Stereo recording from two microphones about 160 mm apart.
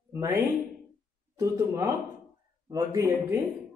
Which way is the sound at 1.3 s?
20° right (ahead or behind).